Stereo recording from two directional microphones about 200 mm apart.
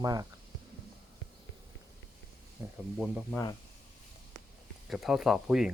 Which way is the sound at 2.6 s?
15° right (ahead or behind).